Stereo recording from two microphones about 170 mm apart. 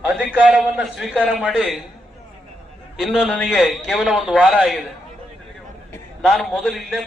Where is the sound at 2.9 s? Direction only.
Centre (ahead or behind).